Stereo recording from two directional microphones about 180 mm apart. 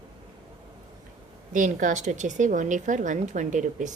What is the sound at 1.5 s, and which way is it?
A woman's voice, 45° right (ahead or behind).